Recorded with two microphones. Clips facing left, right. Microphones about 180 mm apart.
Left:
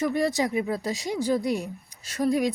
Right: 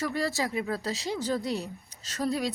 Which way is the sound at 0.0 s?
20° left (ahead or behind).